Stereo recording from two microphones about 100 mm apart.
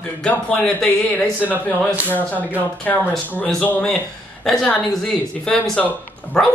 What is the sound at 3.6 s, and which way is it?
Speech, 15° left (ahead or behind).